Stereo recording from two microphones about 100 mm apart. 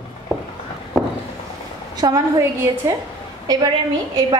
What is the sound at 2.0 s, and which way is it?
Speech, 40° right (ahead or behind).